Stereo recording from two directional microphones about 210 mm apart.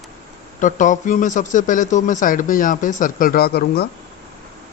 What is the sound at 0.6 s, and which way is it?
Speech, 35° left (ahead or behind).